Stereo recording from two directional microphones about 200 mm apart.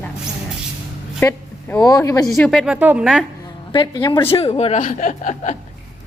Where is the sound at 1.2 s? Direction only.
10° left (ahead or behind).